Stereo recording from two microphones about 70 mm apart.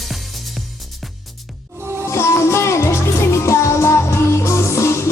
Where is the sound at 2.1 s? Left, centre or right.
Left.